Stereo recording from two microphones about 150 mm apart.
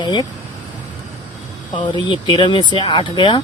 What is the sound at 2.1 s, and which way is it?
Speech, 30° left (ahead or behind).